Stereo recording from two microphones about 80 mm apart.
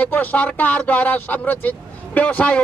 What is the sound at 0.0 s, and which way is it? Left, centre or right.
Speech, left.